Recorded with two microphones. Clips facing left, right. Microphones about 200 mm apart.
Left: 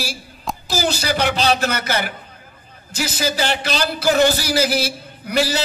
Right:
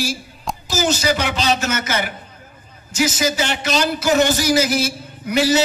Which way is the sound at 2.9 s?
35° left (ahead or behind).